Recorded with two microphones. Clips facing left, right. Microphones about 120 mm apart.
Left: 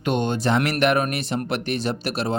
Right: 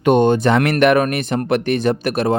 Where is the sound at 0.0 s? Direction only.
55° right (ahead or behind).